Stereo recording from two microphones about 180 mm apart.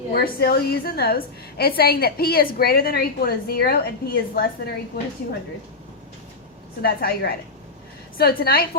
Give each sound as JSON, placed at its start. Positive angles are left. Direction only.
{"t": 0.1, "sound": "a woman's voice", "side_deg": 60}
{"t": 6.8, "sound": "a woman's voice", "side_deg": 55}